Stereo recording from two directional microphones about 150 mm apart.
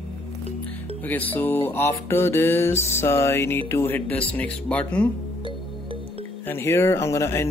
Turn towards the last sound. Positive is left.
turn(degrees=20)  # may be behind; listen again after turning